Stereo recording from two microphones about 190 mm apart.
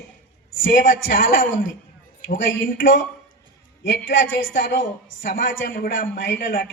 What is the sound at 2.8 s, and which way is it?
A woman's voice, 80° left.